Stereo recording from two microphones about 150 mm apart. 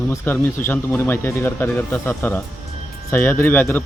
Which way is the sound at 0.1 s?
15° left (ahead or behind).